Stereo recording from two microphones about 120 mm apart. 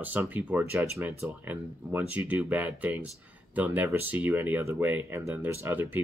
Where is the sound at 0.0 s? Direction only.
15° right (ahead or behind).